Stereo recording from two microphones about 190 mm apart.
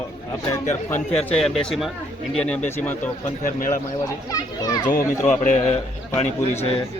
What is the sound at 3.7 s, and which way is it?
A child's voice, 20° left (ahead or behind).